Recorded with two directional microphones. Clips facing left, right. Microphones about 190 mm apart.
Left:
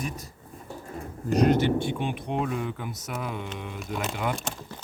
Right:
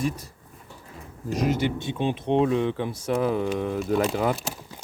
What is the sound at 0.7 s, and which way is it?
Pigeon, 50° left (ahead or behind).